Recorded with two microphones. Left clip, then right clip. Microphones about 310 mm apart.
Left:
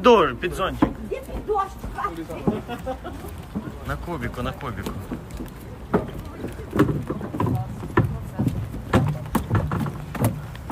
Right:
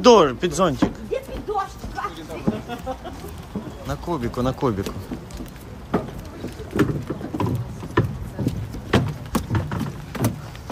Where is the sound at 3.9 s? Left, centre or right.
Centre.